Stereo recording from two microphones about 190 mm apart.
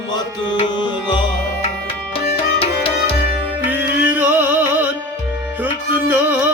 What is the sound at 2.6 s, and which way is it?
Music, 30° left (ahead or behind).